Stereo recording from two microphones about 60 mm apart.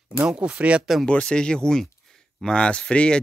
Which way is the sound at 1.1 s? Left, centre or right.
Centre.